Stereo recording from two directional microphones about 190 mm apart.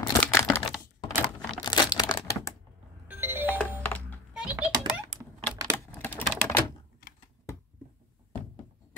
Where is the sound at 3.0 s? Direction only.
10° right (ahead or behind).